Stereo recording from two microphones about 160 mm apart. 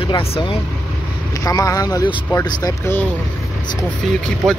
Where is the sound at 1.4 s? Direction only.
20° left (ahead or behind).